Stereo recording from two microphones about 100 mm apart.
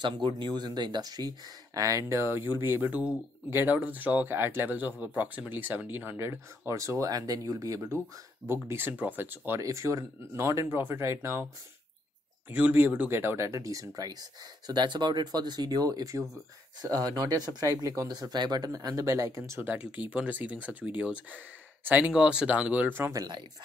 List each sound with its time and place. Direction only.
0.0 s speech: 50° right (ahead or behind); by 11.4 s 25° right (ahead or behind)
12.4 s speech: 15° right (ahead or behind); by 14.1 s 35° right (ahead or behind)
14.7 s speech: 50° right (ahead or behind); by 19.6 s 30° right (ahead or behind)
19.6 s speech: 15° right (ahead or behind)
23.1 s speech: 45° right (ahead or behind)